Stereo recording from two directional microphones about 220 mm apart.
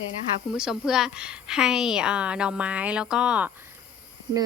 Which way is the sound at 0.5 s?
5° right (ahead or behind).